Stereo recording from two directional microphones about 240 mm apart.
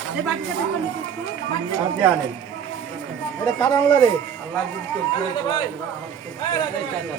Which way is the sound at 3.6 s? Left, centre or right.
Centre.